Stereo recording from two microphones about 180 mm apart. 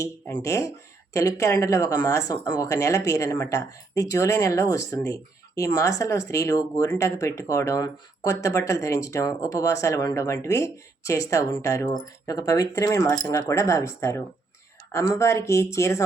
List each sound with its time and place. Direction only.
0.0 s speech: 15° left (ahead or behind)